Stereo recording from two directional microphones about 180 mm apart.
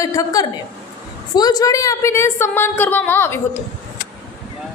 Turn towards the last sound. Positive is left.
turn(degrees=15)  # may be behind; listen again after turning